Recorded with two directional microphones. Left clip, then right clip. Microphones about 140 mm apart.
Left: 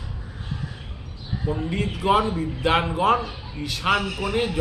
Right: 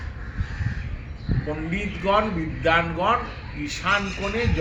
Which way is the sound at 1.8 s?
25° left (ahead or behind).